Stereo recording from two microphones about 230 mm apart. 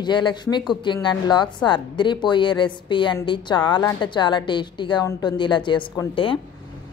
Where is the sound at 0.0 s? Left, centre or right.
Centre.